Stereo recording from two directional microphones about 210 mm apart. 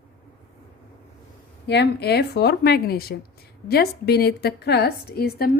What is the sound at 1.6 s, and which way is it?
A woman's voice, 50° left (ahead or behind).